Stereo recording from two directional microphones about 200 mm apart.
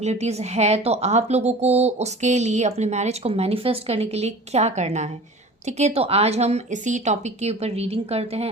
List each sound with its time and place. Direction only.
0.0 s a woman's voice: 35° right (ahead or behind)